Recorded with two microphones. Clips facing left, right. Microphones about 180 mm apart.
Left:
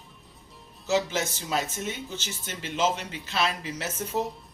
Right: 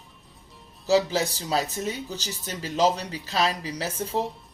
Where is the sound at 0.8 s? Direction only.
35° right (ahead or behind).